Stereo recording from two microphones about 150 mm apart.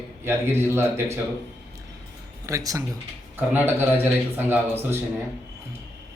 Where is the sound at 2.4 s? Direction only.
20° right (ahead or behind).